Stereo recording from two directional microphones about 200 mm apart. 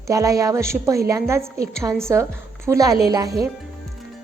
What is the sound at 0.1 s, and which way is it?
A woman's voice, 15° right (ahead or behind).